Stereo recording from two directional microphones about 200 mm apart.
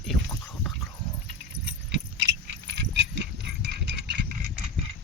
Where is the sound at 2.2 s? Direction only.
60° right (ahead or behind).